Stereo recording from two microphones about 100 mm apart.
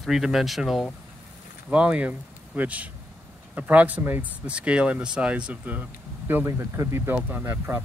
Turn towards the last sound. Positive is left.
turn(degrees=-25)  # may be behind; listen again after turning